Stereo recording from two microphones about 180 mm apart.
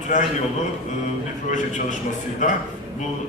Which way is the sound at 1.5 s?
45° left (ahead or behind).